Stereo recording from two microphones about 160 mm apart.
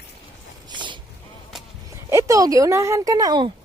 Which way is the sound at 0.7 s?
30° right (ahead or behind).